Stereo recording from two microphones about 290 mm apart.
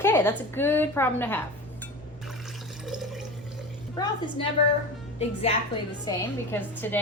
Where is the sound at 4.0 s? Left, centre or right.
Centre.